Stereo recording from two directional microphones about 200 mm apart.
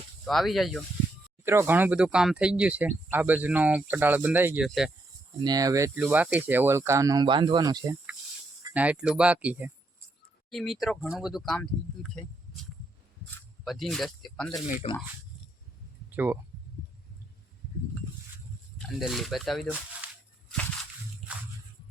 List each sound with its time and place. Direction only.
0.3 s speech: centre (ahead or behind)
1.5 s speech: 10° right (ahead or behind)
5.4 s speech: 20° right (ahead or behind)
8.7 s speech: 5° right (ahead or behind)
13.7 s speech: centre (ahead or behind)
14.8 s speech: 30° left (ahead or behind)
16.1 s speech: 10° right (ahead or behind)
18.8 s speech: centre (ahead or behind)